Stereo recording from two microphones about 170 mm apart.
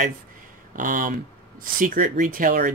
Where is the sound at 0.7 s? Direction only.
50° right (ahead or behind).